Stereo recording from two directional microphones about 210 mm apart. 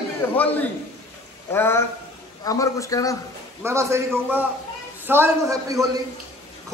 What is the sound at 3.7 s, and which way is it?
A man's voice, 15° right (ahead or behind).